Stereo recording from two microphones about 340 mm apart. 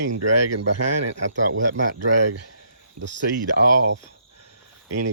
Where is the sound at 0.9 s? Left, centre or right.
Right.